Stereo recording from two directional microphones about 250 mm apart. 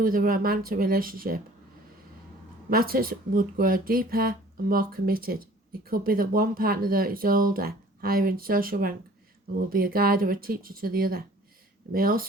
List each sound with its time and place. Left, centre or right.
0.0 s speech: right
2.6 s speech: right